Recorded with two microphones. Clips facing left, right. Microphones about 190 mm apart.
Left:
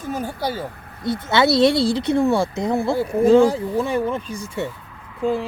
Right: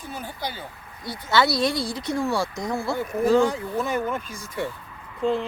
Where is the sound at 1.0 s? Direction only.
25° left (ahead or behind).